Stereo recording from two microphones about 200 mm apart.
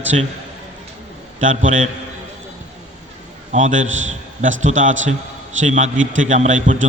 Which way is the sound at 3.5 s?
40° right (ahead or behind).